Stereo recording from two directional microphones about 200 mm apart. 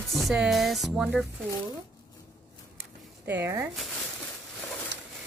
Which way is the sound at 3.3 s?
10° right (ahead or behind).